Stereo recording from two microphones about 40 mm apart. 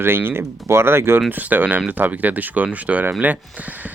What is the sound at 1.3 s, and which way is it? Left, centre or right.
Speech, right.